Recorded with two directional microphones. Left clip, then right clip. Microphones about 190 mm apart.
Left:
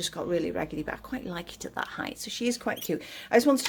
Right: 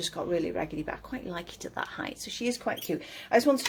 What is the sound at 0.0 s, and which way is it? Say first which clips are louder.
Speech: left 1 dB; 30° left (ahead or behind).